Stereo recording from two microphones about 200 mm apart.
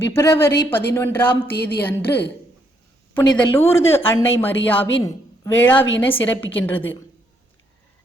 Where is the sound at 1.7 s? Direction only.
55° left (ahead or behind).